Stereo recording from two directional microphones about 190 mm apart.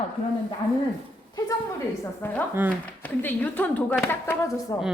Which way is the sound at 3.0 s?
10° left (ahead or behind).